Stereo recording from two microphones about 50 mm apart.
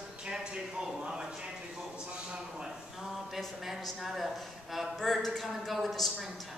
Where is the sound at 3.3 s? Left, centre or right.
Centre.